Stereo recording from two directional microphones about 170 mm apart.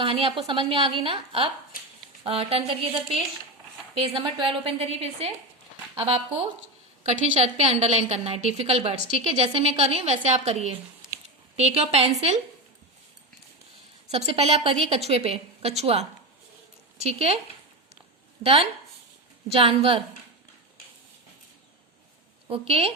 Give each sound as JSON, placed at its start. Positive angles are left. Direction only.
{"t": 0.0, "sound": "a woman's voice", "side_deg": -30}
{"t": 14.1, "sound": "a woman's voice", "side_deg": -35}
{"t": 18.4, "sound": "a woman's voice", "side_deg": -35}
{"t": 22.4, "sound": "a woman's voice", "side_deg": -35}